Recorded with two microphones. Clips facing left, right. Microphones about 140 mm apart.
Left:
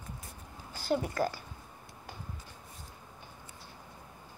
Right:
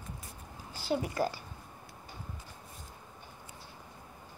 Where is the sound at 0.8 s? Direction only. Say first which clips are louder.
Left 1 dB; 5° right (ahead or behind).